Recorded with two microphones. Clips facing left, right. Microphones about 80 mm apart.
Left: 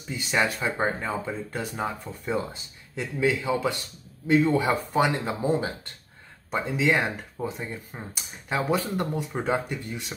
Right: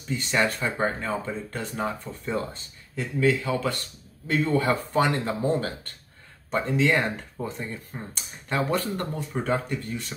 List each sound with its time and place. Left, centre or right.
0.1 s speech: centre